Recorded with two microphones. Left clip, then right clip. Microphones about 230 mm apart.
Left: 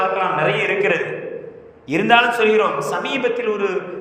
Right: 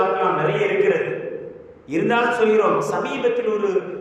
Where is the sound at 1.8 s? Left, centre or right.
Left.